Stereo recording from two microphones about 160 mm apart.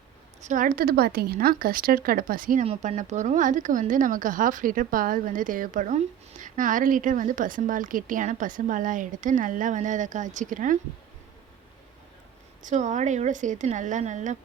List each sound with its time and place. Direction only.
0.4 s speech: 55° right (ahead or behind)
2.6 s speech: 45° right (ahead or behind)
12.6 s a woman's voice: 50° right (ahead or behind)